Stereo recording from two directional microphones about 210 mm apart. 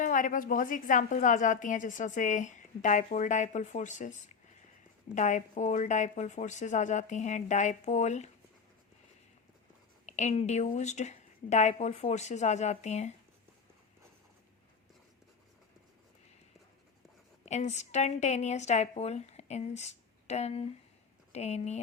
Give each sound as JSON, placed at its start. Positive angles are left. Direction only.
{"t": 0.0, "sound": "a woman's voice", "side_deg": 40}
{"t": 5.1, "sound": "a woman's voice", "side_deg": 35}
{"t": 10.1, "sound": "a woman's voice", "side_deg": 35}
{"t": 17.4, "sound": "a woman's voice", "side_deg": 35}